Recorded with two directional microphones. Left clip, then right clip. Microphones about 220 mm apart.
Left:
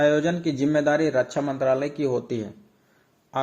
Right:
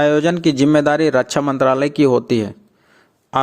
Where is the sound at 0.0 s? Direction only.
35° right (ahead or behind).